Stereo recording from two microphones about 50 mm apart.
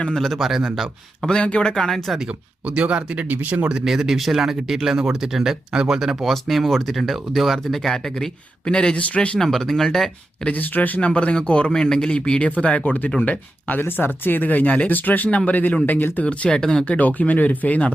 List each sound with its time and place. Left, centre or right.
0.0 s speech: centre
0.3 s speech: centre
1.3 s speech: left
1.7 s speech: centre
2.6 s speech: right
3.7 s speech: centre; by 9.4 s left
9.4 s speech: centre
10.5 s speech: left
13.1 s speech: left
13.8 s speech: left
16.2 s speech: centre
16.8 s speech: left